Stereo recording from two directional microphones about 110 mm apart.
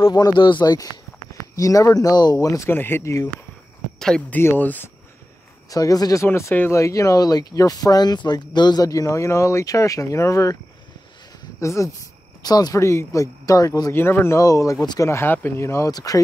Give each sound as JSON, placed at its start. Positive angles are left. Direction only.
{"t": 0.1, "sound": "speech", "side_deg": 40}
{"t": 4.0, "sound": "speech", "side_deg": 5}
{"t": 4.4, "sound": "speech", "side_deg": 20}
{"t": 5.7, "sound": "speech", "side_deg": 30}
{"t": 6.2, "sound": "speech", "side_deg": 20}
{"t": 11.6, "sound": "speech", "side_deg": 30}
{"t": 13.9, "sound": "speech", "side_deg": 20}